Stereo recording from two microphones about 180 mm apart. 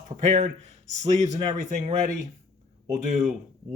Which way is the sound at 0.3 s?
40° right (ahead or behind).